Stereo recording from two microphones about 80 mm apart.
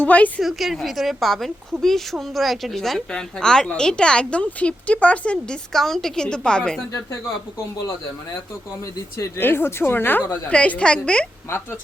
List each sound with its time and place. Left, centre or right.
0.0 s a woman's voice: centre
0.4 s a woman's voice: centre
9.4 s speech: left
10.5 s a woman's voice: centre
11.4 s speech: left